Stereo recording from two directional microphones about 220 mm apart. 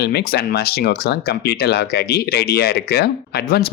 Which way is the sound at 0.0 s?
45° left (ahead or behind).